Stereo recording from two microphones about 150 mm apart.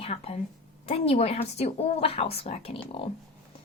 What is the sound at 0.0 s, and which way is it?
A woman's voice, 45° left (ahead or behind).